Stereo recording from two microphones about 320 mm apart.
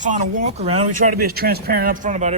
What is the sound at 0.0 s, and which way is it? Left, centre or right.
A man's voice, right.